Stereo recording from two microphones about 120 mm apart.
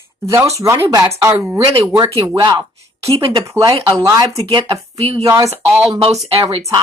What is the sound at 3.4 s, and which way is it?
Speech, 25° right (ahead or behind).